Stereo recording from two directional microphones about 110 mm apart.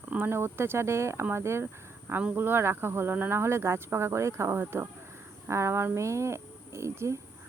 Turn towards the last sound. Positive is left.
turn(degrees=-25)  # may be behind; listen again after turning